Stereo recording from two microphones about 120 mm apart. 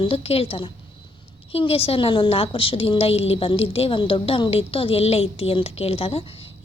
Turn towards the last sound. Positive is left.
turn(degrees=55)  # may be behind; listen again after turning